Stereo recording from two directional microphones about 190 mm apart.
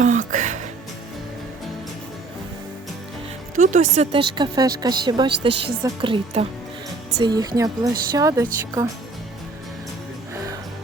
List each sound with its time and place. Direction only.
0.0 s music: 40° right (ahead or behind)
3.5 s a woman's voice: 40° right (ahead or behind); by 5.3 s 25° right (ahead or behind)
5.5 s a woman's voice: 65° right (ahead or behind)
5.8 s a woman's voice: 25° right (ahead or behind)